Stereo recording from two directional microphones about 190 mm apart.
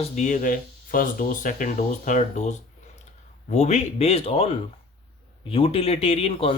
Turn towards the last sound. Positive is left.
turn(degrees=30)  # may be behind; listen again after turning